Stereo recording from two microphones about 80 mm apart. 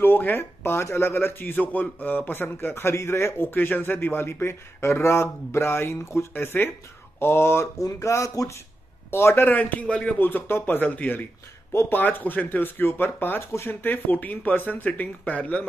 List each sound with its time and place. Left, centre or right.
0.0 s speech: left
11.7 s speech: left
12.0 s speech: left